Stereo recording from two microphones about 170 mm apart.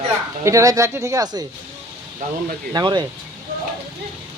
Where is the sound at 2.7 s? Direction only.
25° right (ahead or behind).